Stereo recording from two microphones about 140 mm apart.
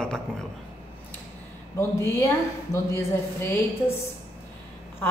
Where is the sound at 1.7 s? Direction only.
20° left (ahead or behind).